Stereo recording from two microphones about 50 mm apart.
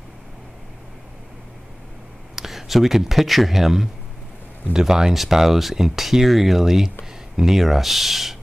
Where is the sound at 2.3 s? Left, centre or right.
Centre.